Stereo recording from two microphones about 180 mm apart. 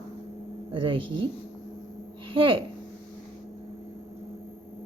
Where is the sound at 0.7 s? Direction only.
30° right (ahead or behind).